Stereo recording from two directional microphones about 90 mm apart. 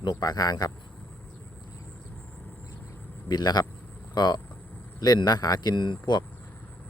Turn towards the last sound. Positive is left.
turn(degrees=55)  # may be behind; listen again after turning